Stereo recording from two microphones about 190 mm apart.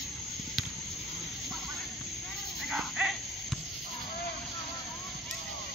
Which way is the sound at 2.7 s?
Centre (ahead or behind).